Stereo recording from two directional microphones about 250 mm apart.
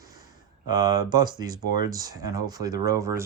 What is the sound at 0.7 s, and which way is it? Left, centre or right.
Speech, centre.